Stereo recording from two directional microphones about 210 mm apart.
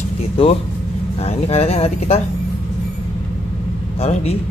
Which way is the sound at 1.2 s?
30° left (ahead or behind).